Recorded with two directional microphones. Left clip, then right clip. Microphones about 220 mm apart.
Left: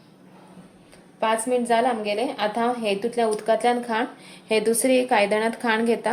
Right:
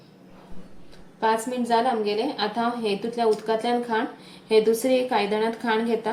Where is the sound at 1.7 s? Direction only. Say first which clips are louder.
Right 2 dB; 45° left (ahead or behind).